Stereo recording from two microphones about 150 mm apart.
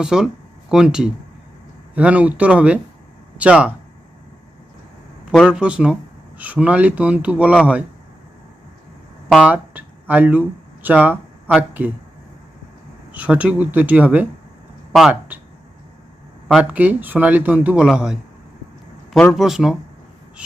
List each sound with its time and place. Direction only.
0.0 s speech: 5° right (ahead or behind)
5.2 s speech: 5° right (ahead or behind)
9.3 s speech: 10° right (ahead or behind)
13.1 s speech: 10° right (ahead or behind)
16.5 s speech: 5° right (ahead or behind)